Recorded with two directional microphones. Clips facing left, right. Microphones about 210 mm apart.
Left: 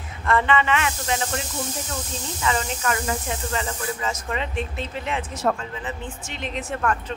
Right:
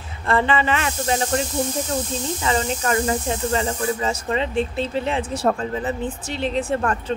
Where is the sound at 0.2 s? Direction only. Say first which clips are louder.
Right 1 dB; 30° right (ahead or behind).